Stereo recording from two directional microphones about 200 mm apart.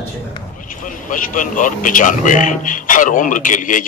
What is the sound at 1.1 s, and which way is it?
A man's voice, 40° left (ahead or behind).